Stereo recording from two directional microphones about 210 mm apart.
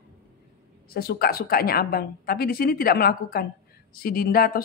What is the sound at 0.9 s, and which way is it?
A woman's voice, 45° left (ahead or behind).